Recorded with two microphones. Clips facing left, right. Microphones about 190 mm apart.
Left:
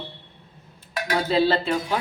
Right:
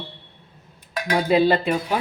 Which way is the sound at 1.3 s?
15° right (ahead or behind).